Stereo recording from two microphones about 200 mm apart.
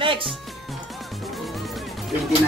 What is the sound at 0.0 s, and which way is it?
Music, 25° right (ahead or behind).